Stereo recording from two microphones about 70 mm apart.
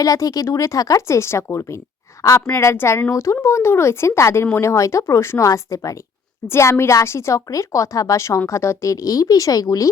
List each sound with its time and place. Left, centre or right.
0.0 s speech: left
1.0 s a woman's voice: left
5.5 s speech: left
6.5 s a woman's voice: left